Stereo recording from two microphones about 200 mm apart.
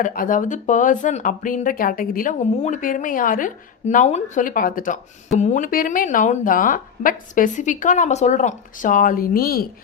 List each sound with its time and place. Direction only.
0.0 s speech: 45° left (ahead or behind)